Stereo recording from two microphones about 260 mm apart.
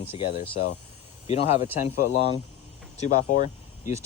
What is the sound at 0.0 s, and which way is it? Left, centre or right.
Speech, left.